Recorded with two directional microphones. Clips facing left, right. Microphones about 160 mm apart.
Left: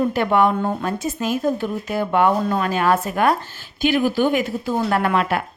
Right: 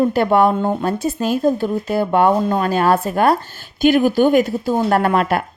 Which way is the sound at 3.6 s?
45° right (ahead or behind).